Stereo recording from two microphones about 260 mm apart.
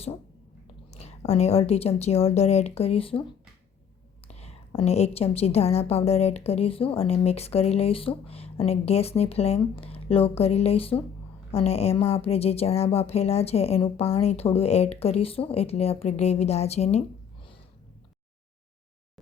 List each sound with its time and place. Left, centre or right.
0.9 s a woman's voice: left
4.3 s a woman's voice: left